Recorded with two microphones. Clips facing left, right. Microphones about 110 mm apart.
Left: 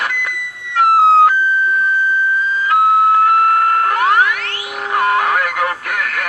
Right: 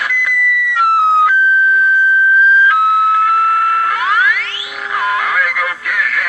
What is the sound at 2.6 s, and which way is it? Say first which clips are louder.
Music: even; 40° left (ahead or behind).